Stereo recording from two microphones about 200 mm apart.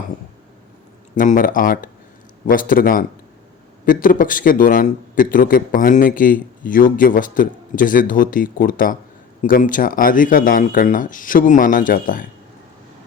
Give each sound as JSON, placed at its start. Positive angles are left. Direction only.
{"t": 1.1, "sound": "a man's voice", "side_deg": 40}